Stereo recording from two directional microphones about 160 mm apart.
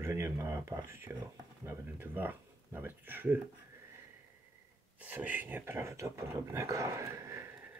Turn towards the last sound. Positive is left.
turn(degrees=-15)  # may be behind; listen again after turning